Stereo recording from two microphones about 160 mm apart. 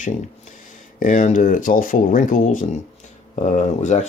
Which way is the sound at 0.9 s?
55° left (ahead or behind).